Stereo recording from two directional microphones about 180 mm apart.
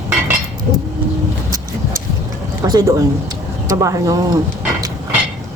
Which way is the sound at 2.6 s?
20° right (ahead or behind).